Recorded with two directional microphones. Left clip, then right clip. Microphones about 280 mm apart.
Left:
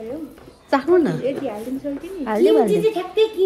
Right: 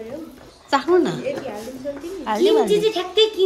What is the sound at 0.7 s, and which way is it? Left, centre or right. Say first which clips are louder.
Speech: left 1 dB; centre.